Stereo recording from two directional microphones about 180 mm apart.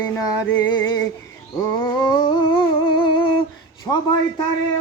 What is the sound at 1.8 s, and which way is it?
Humming, 25° left (ahead or behind).